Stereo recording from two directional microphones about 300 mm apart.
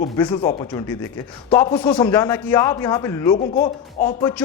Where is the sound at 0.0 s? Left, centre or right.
Centre.